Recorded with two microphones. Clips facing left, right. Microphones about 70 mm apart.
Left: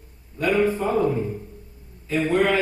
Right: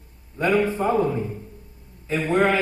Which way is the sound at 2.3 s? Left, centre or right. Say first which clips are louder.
Right 1 dB; right.